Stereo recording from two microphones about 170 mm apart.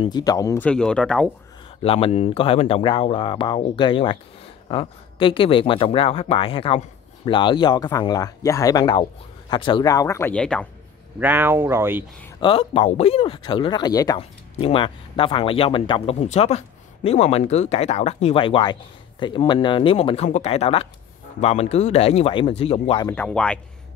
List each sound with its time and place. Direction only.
0.0 s speech: 25° left (ahead or behind)
0.7 s speech: 5° left (ahead or behind)
1.8 s speech: 35° left (ahead or behind); by 10.7 s 5° left (ahead or behind)
11.1 s speech: 10° right (ahead or behind)
12.4 s speech: 35° left (ahead or behind)
14.6 s speech: 35° left (ahead or behind)
23.0 s speech: 10° left (ahead or behind)